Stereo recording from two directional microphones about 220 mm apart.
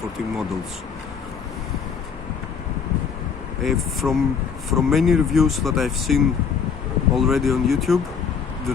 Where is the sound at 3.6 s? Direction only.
Centre (ahead or behind).